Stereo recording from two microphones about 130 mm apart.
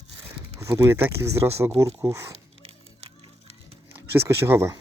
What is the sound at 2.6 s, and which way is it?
Music, 50° right (ahead or behind).